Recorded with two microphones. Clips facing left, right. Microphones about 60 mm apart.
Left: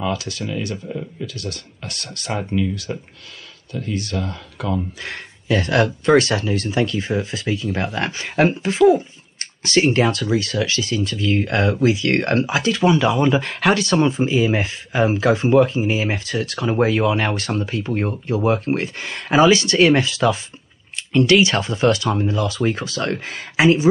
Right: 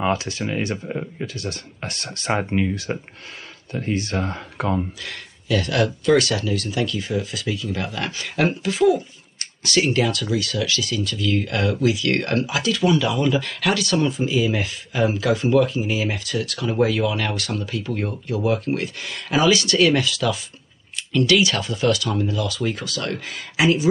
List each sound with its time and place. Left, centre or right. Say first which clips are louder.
0.0 s speech: right 2 dB; right
5.0 s speech: left 4 dB; left